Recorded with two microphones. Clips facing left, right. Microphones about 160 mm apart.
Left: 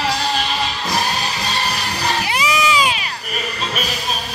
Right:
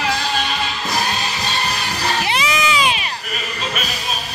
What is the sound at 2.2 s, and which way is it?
Cat, 25° right (ahead or behind).